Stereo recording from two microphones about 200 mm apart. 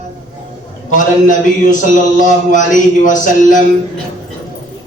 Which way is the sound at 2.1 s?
40° left (ahead or behind).